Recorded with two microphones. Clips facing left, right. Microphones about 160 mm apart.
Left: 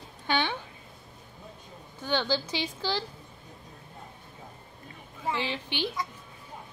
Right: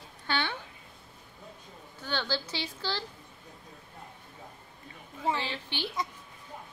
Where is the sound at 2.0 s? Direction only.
15° left (ahead or behind).